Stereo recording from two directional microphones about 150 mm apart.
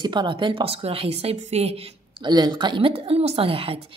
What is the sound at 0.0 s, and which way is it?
Speech, 30° right (ahead or behind).